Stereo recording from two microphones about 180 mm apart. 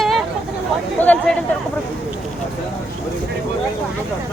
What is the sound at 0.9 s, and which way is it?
Speech, 10° left (ahead or behind).